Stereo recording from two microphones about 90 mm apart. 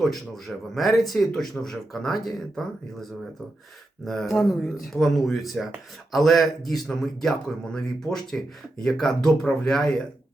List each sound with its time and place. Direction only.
0.0 s speech: centre (ahead or behind)